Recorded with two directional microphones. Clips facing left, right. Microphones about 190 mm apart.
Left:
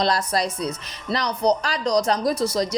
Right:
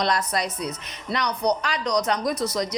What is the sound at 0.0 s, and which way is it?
Speech, 30° left (ahead or behind).